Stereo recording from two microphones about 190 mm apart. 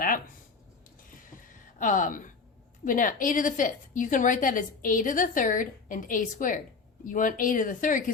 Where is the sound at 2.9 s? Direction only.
45° left (ahead or behind).